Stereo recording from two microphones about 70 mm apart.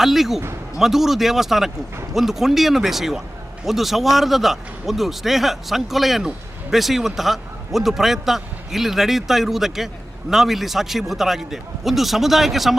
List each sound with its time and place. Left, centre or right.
0.0 s a man's voice: centre